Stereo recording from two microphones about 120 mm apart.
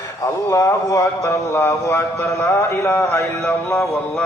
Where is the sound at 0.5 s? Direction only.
25° left (ahead or behind).